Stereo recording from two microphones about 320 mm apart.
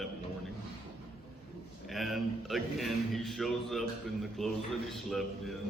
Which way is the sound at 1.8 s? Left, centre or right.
Centre.